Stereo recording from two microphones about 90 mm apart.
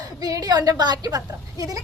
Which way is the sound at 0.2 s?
45° right (ahead or behind).